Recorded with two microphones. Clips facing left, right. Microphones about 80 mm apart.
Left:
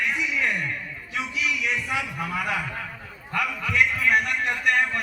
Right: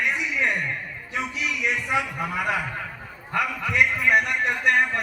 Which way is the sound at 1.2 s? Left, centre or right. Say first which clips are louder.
Even; right.